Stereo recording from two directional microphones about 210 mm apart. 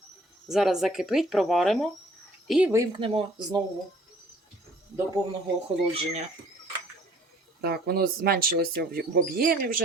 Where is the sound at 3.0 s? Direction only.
25° right (ahead or behind).